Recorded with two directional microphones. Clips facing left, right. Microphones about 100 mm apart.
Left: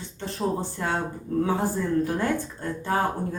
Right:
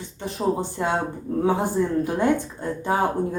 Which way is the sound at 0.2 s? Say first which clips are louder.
Right 3 dB; 15° right (ahead or behind).